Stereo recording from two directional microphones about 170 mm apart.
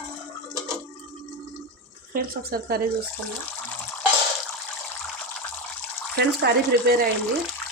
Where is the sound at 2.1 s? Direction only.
60° right (ahead or behind).